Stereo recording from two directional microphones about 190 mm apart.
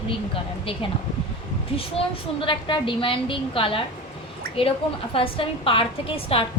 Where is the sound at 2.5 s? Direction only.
25° left (ahead or behind).